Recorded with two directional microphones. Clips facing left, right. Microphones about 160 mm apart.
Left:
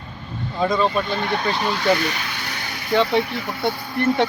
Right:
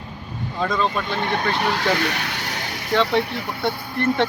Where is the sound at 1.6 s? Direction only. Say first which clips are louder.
Left 1 dB; 70° right (ahead or behind).